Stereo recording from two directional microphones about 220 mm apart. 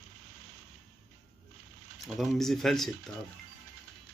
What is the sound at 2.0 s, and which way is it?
Speech, centre (ahead or behind).